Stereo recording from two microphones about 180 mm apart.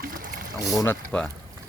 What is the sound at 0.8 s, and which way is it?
Speech, 5° left (ahead or behind).